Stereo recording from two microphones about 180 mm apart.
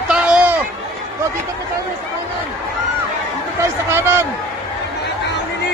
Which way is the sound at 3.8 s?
15° right (ahead or behind).